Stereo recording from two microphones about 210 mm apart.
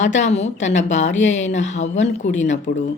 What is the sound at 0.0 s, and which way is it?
A woman's voice, 35° left (ahead or behind).